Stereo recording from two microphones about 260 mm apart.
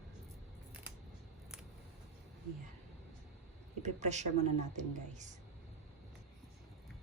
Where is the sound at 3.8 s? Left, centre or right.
Right.